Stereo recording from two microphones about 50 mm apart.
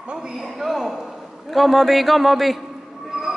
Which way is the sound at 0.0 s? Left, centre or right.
Centre.